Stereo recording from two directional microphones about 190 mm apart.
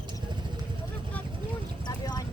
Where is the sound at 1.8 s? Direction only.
20° left (ahead or behind).